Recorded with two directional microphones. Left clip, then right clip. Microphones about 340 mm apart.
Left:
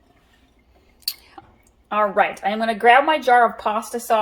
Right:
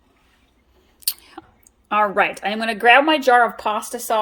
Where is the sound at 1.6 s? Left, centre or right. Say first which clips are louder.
Right 2 dB; right.